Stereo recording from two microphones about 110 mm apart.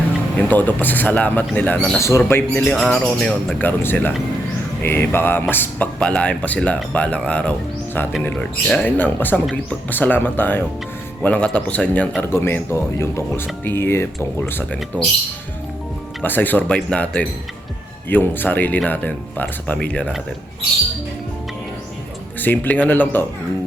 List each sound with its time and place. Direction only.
0.3 s speech: 15° left (ahead or behind)
2.0 s speech: 25° left (ahead or behind)
2.6 s speech: 10° left (ahead or behind)
3.6 s speech: 20° left (ahead or behind)
16.2 s speech: 15° left (ahead or behind)
22.4 s speech: 15° left (ahead or behind)